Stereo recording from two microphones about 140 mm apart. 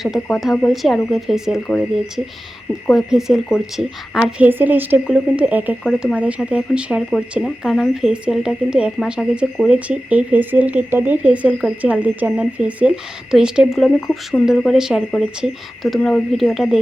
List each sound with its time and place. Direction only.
0.0 s speech: centre (ahead or behind)
2.9 s speech: 5° right (ahead or behind)